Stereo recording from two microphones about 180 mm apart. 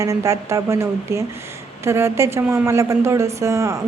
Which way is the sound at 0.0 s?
15° right (ahead or behind).